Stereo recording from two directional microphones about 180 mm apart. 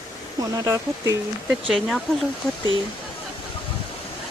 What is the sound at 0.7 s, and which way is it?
Speech, 20° right (ahead or behind).